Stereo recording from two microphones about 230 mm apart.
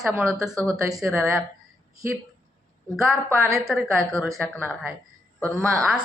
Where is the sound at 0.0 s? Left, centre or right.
Centre.